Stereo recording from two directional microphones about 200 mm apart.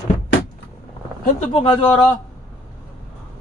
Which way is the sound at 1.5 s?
25° left (ahead or behind).